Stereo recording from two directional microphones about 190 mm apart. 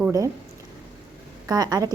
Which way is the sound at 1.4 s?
20° right (ahead or behind).